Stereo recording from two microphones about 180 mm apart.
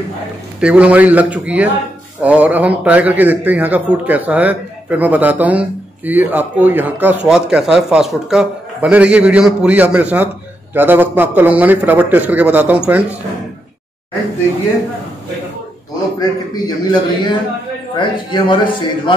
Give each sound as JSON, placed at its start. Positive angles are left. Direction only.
{"t": 0.6, "sound": "speech", "side_deg": -5}
{"t": 16.2, "sound": "a man's voice", "side_deg": 25}